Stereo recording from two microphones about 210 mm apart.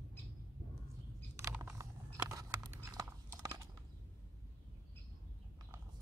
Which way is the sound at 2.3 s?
15° right (ahead or behind).